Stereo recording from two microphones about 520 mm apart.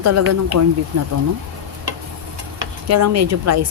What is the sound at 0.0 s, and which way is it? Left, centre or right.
Speech, right.